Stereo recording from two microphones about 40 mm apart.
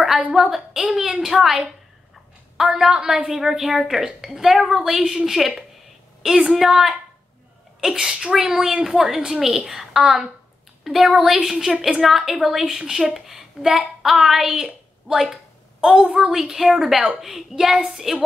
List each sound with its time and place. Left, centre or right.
0.3 s a woman's voice: centre